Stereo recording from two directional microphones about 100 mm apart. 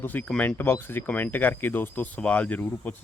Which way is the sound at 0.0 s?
20° left (ahead or behind).